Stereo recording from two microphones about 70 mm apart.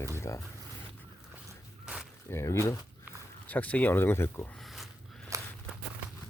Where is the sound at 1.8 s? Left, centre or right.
Centre.